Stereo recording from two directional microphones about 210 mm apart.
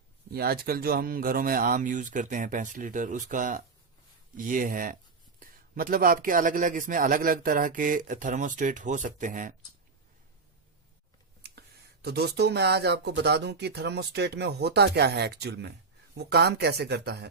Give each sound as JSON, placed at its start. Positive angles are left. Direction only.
{"t": 0.3, "sound": "speech", "side_deg": -45}
{"t": 11.4, "sound": "a sound", "side_deg": -50}
{"t": 12.0, "sound": "speech", "side_deg": -50}